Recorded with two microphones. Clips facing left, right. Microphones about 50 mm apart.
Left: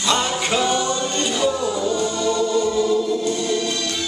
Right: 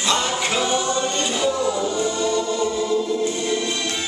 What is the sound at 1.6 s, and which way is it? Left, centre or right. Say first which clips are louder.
Music: even; centre.